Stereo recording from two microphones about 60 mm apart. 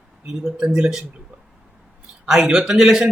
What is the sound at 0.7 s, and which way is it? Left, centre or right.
Speech, centre.